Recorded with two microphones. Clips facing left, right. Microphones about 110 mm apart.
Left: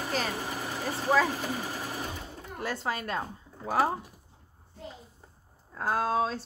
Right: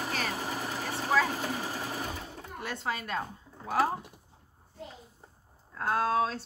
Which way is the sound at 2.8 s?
40° left (ahead or behind).